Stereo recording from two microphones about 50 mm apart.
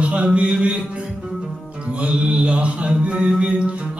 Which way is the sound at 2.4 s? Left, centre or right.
Right.